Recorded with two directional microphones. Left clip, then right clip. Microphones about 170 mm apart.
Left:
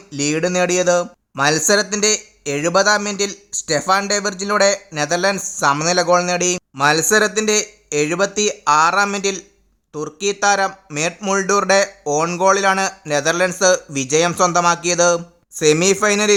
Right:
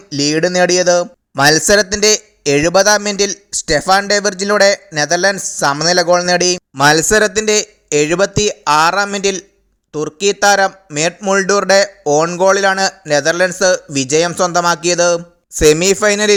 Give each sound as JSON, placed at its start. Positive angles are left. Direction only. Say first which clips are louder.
{"t": 0.1, "sound": "speech", "louder": "right 5 dB", "side_deg": -25}
{"t": 10.9, "sound": "speech", "louder": "right 5 dB", "side_deg": -5}
{"t": 11.3, "sound": "speech", "louder": "right 4 dB", "side_deg": -20}